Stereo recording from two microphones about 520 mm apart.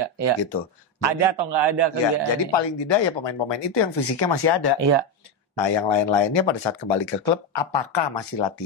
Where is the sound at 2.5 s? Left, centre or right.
Left.